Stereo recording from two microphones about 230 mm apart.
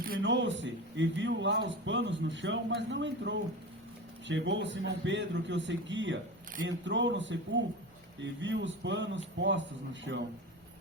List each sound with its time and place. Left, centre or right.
0.0 s speech: right